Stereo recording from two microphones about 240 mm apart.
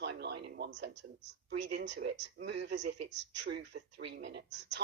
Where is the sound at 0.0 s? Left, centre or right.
Right.